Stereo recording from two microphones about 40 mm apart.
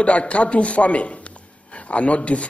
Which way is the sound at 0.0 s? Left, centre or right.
Left.